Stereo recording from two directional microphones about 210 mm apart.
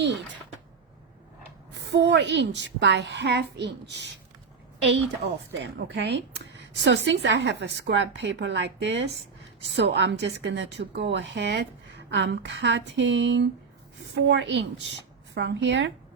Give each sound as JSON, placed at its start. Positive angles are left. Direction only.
{"t": 1.7, "sound": "a woman's voice", "side_deg": -55}
{"t": 5.5, "sound": "a woman's voice", "side_deg": -55}